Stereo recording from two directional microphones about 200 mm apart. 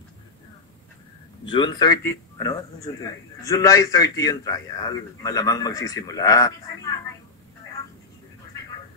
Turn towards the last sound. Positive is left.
turn(degrees=15)  # may be behind; listen again after turning